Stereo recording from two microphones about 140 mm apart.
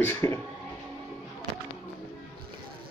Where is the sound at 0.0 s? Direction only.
15° left (ahead or behind).